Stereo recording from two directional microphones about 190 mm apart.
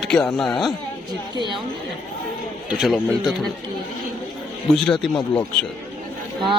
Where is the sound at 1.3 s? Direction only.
25° right (ahead or behind).